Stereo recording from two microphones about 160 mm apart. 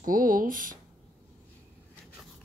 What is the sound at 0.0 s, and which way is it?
Speech, 60° right (ahead or behind).